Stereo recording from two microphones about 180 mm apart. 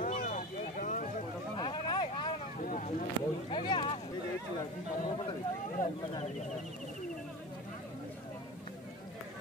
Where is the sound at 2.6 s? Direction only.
45° left (ahead or behind).